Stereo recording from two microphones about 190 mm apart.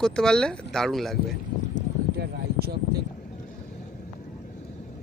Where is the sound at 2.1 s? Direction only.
55° right (ahead or behind).